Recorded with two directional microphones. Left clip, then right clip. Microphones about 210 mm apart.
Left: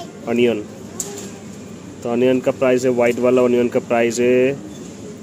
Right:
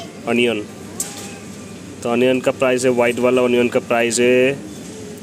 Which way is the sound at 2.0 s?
Centre (ahead or behind).